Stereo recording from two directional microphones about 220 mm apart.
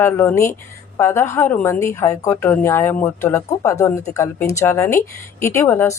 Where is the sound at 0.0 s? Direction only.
10° left (ahead or behind).